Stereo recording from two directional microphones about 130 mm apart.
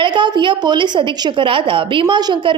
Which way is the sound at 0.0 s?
35° right (ahead or behind).